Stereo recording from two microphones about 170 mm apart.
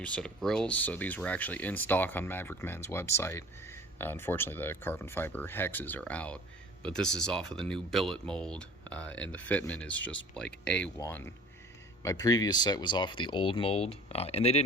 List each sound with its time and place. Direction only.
0.0 s speech: 5° left (ahead or behind)
10.9 s speech: 15° left (ahead or behind); by 14.6 s 35° left (ahead or behind)